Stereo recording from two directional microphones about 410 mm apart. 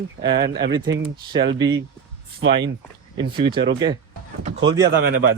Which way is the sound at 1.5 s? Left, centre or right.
Centre.